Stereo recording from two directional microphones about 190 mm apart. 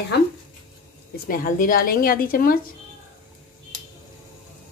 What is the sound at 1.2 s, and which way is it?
A woman's voice, 45° left (ahead or behind).